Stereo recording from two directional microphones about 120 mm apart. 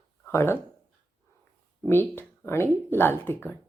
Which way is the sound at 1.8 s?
20° left (ahead or behind).